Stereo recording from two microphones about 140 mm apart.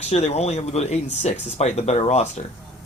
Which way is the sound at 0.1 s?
50° left (ahead or behind).